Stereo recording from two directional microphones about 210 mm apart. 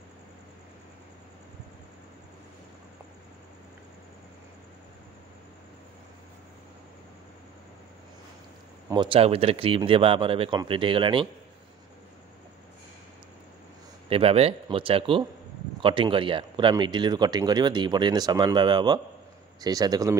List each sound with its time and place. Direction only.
8.9 s speech: 25° right (ahead or behind)
14.0 s speech: 25° right (ahead or behind)